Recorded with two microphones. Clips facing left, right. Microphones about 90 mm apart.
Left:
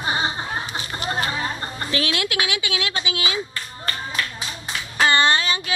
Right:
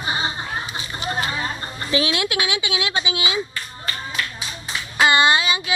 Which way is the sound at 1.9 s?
20° right (ahead or behind).